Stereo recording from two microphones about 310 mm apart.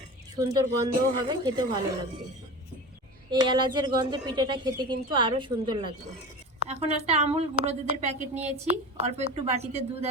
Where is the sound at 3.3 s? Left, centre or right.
Centre.